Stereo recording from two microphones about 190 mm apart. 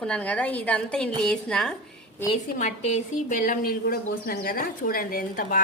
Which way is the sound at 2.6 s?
40° left (ahead or behind).